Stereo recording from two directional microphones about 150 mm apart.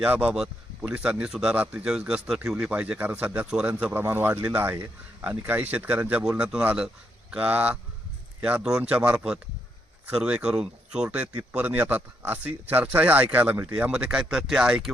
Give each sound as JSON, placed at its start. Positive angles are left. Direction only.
{"t": 0.0, "sound": "speech", "side_deg": -10}